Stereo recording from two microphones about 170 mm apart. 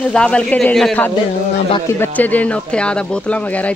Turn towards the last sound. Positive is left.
turn(degrees=10)  # may be behind; listen again after turning